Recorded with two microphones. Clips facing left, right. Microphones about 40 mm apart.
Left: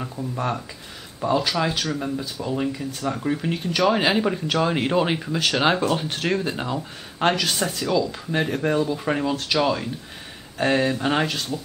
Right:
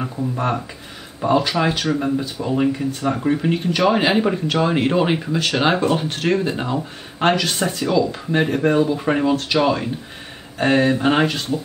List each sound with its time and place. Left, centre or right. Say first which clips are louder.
0.0 s speech: right 5 dB; right